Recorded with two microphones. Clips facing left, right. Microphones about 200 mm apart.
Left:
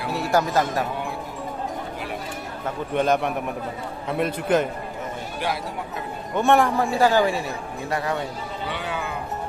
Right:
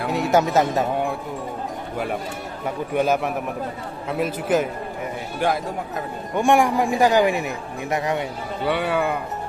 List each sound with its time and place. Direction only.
0.1 s speech: 20° right (ahead or behind)
2.6 s a man's voice: 10° right (ahead or behind)
6.3 s a man's voice: 15° right (ahead or behind)
8.6 s speech: 60° right (ahead or behind)